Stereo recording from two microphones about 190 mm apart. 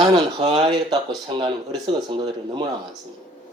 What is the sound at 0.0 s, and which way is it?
Speech, 20° right (ahead or behind).